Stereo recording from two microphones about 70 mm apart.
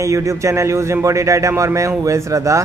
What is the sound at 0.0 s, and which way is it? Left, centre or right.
A man's voice, right.